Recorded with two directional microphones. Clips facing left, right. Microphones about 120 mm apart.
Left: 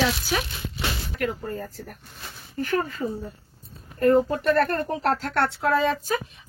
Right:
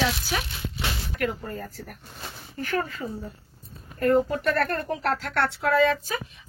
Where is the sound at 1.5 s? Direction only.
20° left (ahead or behind).